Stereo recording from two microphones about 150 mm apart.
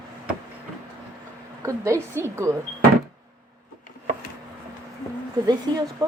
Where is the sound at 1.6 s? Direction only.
20° right (ahead or behind).